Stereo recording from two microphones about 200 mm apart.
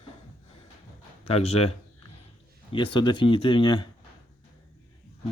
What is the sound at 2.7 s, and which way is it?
Speech, 25° left (ahead or behind).